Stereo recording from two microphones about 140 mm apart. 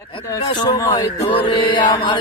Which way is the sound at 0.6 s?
30° left (ahead or behind).